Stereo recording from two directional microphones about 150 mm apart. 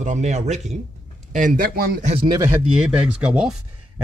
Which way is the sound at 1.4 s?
65° right (ahead or behind).